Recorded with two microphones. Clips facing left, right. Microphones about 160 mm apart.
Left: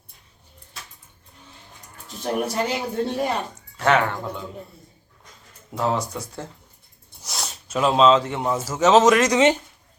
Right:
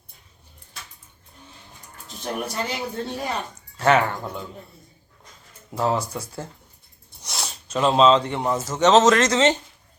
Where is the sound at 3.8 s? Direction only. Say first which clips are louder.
Right 1 dB; 5° right (ahead or behind).